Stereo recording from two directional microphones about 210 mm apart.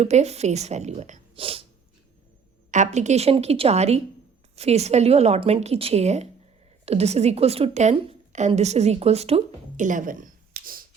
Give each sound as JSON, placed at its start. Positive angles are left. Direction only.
{"t": 0.0, "sound": "a woman's voice", "side_deg": -30}
{"t": 2.7, "sound": "a woman's voice", "side_deg": -35}